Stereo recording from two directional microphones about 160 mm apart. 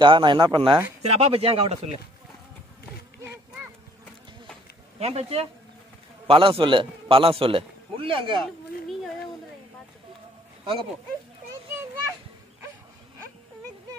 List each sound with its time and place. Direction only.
0.0 s a man's voice: 30° right (ahead or behind)
1.0 s a man's voice: 40° right (ahead or behind)
4.9 s a man's voice: 40° right (ahead or behind)